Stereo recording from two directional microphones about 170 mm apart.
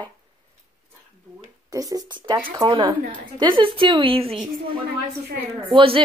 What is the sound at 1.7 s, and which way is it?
A woman's voice, 20° right (ahead or behind).